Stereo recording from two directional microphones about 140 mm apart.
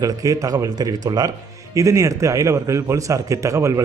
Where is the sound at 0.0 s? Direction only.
25° right (ahead or behind).